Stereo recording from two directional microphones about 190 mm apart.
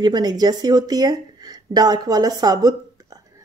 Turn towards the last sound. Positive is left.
turn(degrees=-20)  # may be behind; listen again after turning